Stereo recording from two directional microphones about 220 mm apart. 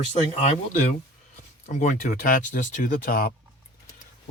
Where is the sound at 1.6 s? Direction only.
35° left (ahead or behind).